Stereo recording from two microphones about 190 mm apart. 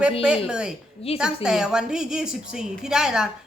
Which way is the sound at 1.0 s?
30° left (ahead or behind).